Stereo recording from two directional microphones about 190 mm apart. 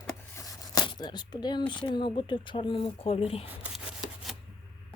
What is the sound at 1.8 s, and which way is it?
Speech, 25° left (ahead or behind).